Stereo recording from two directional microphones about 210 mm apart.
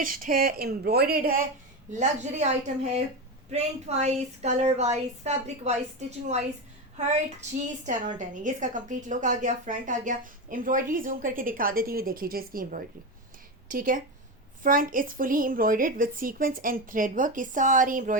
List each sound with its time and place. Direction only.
0.0 s speech: 40° right (ahead or behind)
1.9 s a woman's voice: 35° right (ahead or behind)
7.9 s a woman's voice: 35° right (ahead or behind)